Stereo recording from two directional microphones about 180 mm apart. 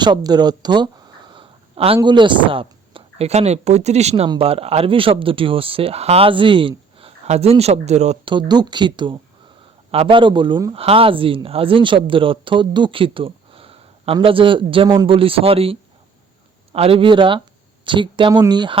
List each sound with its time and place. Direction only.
0.0 s a sound: 25° right (ahead or behind)
2.0 s speech: 25° right (ahead or behind)
8.3 s speech: 25° right (ahead or behind)